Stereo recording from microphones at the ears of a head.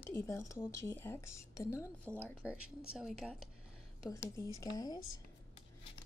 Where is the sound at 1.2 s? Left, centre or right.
Left.